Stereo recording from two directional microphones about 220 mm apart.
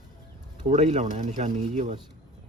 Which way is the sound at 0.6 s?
30° right (ahead or behind).